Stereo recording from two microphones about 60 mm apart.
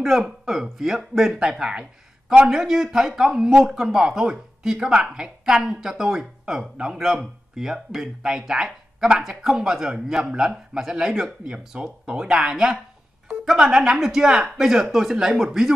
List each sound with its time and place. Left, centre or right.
0.5 s speech: centre